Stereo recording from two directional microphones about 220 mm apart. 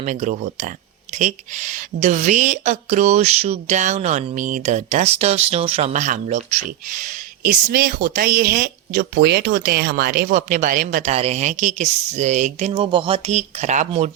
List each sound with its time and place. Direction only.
0.0 s a woman's voice: 35° right (ahead or behind)